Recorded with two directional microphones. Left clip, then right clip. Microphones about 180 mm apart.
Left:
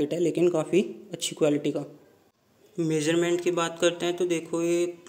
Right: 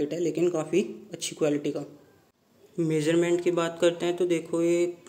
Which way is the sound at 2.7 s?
5° right (ahead or behind).